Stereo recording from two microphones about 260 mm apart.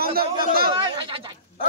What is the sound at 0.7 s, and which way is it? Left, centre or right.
Speech, centre.